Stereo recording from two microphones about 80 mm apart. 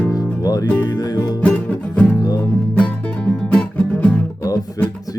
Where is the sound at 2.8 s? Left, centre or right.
Centre.